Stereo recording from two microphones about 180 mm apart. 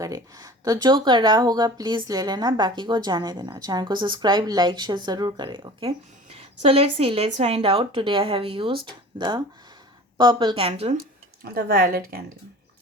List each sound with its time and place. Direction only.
0.0 s speech: 20° right (ahead or behind)
11.4 s speech: 60° right (ahead or behind)